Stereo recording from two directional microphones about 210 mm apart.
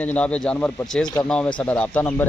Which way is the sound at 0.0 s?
5° left (ahead or behind).